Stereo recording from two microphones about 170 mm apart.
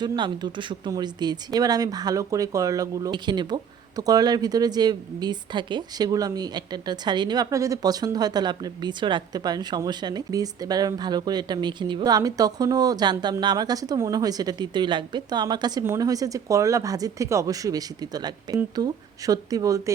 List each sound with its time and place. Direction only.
0.0 s speech: 25° right (ahead or behind)